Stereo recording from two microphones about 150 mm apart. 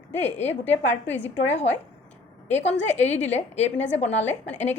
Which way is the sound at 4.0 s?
50° left (ahead or behind).